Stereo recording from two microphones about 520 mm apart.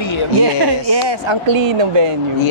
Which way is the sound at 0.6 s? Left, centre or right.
Right.